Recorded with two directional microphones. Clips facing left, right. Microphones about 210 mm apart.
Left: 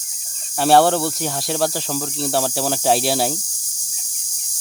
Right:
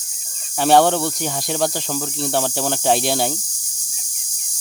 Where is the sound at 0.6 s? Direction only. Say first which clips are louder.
Even; centre (ahead or behind).